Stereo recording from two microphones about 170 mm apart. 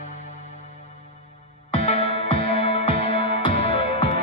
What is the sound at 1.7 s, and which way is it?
Music, 35° left (ahead or behind).